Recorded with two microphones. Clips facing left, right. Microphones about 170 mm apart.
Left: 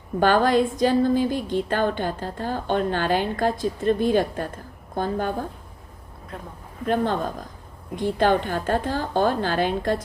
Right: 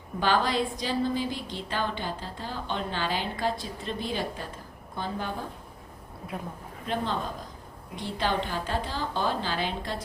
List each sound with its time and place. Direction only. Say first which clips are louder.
0.2 s a woman's voice: left 7 dB; 50° left (ahead or behind)
6.8 s a woman's voice: left 7 dB; 50° left (ahead or behind)